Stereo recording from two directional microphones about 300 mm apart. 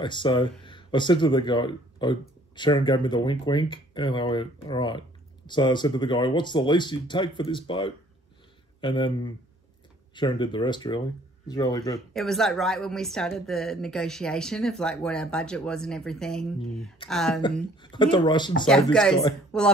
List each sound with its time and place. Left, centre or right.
0.0 s speech: centre
12.1 s a woman's voice: centre
17.9 s speech: centre
19.5 s a sound: centre